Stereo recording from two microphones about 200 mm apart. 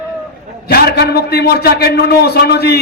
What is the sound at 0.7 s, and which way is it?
A man's voice, 50° left (ahead or behind).